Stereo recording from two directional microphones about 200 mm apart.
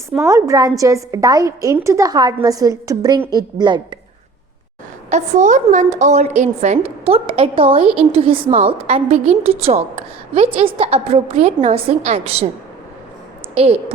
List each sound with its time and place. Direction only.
0.3 s a woman's voice: 15° right (ahead or behind)
5.0 s a woman's voice: 35° right (ahead or behind)
13.6 s a woman's voice: 30° right (ahead or behind)